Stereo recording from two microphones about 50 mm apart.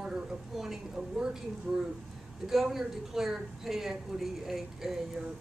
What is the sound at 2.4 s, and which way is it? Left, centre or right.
A woman's voice, centre.